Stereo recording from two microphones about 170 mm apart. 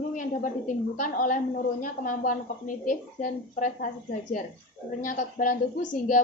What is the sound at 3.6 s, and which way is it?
A woman's voice, 50° left (ahead or behind).